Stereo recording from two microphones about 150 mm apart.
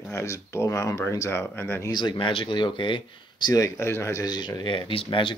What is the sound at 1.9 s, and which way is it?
Speech, 35° left (ahead or behind).